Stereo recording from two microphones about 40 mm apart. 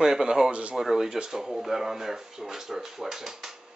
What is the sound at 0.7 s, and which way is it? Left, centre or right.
Speech, centre.